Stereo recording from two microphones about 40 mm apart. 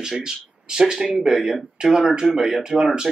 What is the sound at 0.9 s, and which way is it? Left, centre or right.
Speech, centre.